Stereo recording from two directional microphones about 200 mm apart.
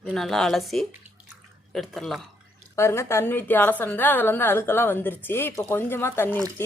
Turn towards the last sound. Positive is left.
turn(degrees=10)  # may be behind; listen again after turning